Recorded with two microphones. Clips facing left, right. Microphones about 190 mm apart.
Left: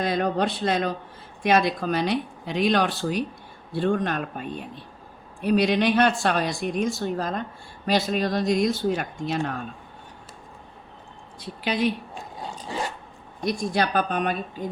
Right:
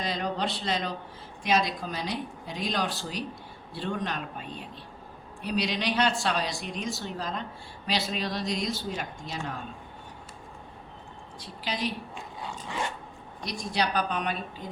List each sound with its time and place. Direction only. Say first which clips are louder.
0.0 s speech: left 7 dB; 55° left (ahead or behind)
11.3 s speech: left 8 dB; 60° left (ahead or behind)
12.1 s zipper: left 3 dB; 35° left (ahead or behind)
13.4 s speech: left 6 dB; 50° left (ahead or behind)